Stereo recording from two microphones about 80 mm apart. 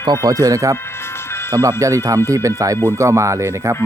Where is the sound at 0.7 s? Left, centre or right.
Left.